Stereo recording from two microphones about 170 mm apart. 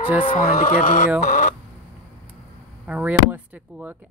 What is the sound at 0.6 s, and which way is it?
Speech, 40° left (ahead or behind).